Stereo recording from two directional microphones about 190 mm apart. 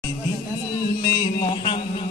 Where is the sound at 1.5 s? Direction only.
25° left (ahead or behind).